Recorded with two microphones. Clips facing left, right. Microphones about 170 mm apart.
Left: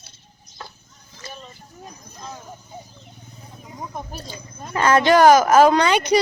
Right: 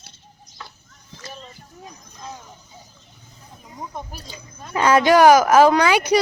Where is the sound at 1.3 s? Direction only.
Centre (ahead or behind).